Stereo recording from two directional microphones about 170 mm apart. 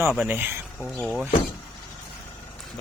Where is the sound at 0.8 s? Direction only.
5° left (ahead or behind).